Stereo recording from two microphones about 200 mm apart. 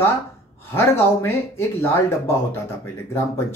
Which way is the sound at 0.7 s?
10° left (ahead or behind).